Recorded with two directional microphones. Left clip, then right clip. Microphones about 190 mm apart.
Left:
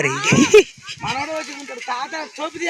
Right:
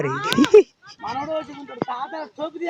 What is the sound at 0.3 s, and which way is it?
Speech, centre (ahead or behind).